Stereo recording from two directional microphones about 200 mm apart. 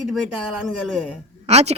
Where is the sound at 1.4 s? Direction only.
35° right (ahead or behind).